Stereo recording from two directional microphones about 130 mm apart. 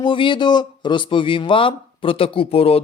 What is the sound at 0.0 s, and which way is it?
Speech, 40° left (ahead or behind).